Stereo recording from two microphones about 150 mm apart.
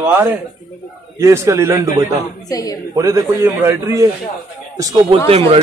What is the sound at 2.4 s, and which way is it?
Speech, 25° left (ahead or behind).